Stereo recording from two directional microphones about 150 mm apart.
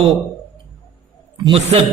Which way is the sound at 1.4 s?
40° right (ahead or behind).